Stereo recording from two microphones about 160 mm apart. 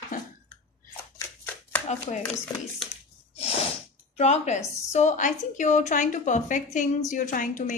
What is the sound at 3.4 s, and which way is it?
Sneeze, 40° left (ahead or behind).